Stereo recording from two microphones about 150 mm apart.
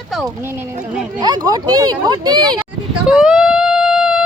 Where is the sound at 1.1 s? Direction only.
25° right (ahead or behind).